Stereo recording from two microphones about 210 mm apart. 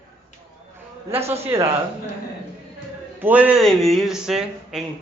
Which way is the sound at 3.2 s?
5° right (ahead or behind).